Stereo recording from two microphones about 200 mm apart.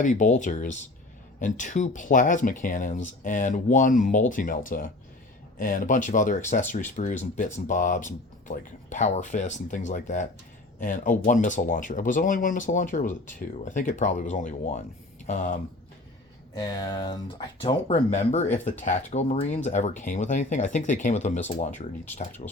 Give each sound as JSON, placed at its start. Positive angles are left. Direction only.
{"t": 0.0, "sound": "speech", "side_deg": 40}
{"t": 16.6, "sound": "speech", "side_deg": 20}